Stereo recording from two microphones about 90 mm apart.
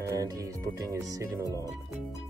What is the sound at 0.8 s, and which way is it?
Speech, 35° right (ahead or behind).